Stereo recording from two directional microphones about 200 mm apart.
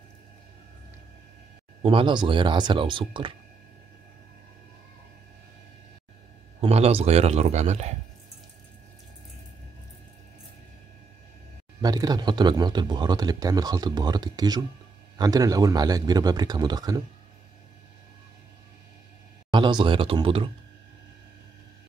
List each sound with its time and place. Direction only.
1.8 s speech: 25° right (ahead or behind)
6.6 s a man's voice: 30° right (ahead or behind)
11.8 s speech: 20° right (ahead or behind)
19.5 s speech: 25° right (ahead or behind)